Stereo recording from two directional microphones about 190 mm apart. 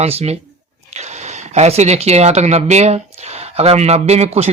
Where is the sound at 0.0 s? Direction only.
35° right (ahead or behind).